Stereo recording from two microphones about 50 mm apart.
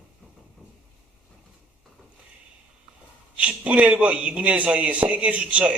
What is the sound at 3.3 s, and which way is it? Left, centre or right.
A man's voice, right.